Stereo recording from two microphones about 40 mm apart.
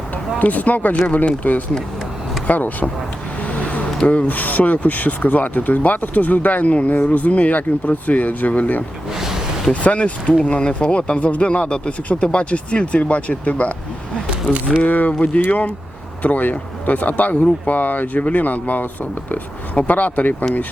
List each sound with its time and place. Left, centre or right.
0.3 s speech: left
3.4 s a sound: left
4.0 s speech: left
9.1 s a sound: centre
9.8 s speech: left
14.8 s speech: left